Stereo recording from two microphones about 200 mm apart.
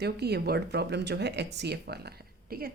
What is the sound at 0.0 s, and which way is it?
Speech, 55° right (ahead or behind).